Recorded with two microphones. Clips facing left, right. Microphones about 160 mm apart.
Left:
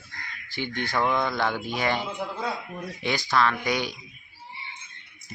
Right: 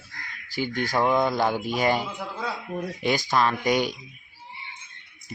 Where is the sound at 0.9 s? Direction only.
15° right (ahead or behind).